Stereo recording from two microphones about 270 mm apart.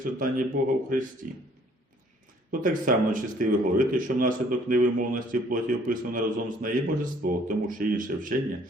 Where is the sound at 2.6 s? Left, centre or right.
Right.